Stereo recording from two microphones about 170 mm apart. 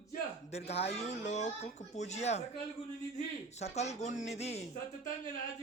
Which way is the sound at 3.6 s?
40° left (ahead or behind).